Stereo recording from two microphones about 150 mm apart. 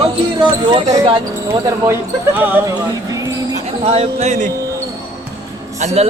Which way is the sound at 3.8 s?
45° right (ahead or behind).